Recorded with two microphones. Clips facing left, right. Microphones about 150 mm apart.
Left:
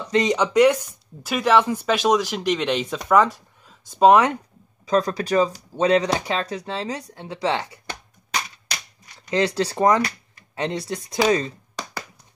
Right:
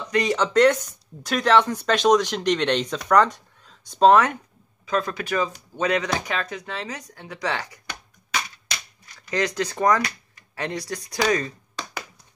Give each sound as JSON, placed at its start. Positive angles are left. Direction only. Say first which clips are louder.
{"t": 0.1, "sound": "speech", "louder": "left 2 dB", "side_deg": 20}
{"t": 4.8, "sound": "speech", "louder": "left 4 dB", "side_deg": 35}